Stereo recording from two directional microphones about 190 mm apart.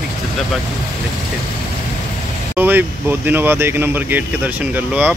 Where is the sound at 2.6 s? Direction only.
10° right (ahead or behind).